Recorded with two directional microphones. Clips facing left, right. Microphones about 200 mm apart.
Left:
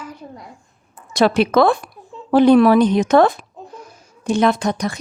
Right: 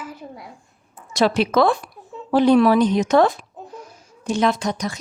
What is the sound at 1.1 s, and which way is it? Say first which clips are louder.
Speech: left 3 dB; 60° left (ahead or behind).